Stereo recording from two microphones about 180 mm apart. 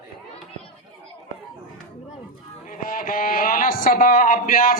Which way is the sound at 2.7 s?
50° left (ahead or behind).